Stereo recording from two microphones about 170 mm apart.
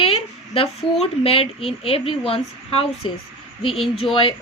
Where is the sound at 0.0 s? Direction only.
35° left (ahead or behind).